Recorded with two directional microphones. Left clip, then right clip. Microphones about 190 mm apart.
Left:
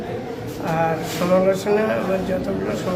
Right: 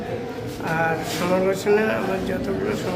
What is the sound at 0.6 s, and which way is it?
Speech, centre (ahead or behind).